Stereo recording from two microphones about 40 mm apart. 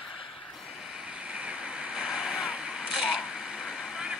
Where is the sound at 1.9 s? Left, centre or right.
Centre.